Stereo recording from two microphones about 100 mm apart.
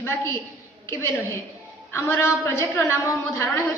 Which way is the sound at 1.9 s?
25° left (ahead or behind).